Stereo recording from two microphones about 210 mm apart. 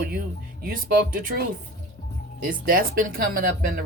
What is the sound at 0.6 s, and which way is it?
Speech, 40° right (ahead or behind).